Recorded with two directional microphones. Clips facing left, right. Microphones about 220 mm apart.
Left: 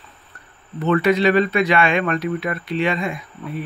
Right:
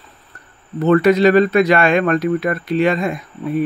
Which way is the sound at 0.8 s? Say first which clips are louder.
Right 5 dB; 40° right (ahead or behind).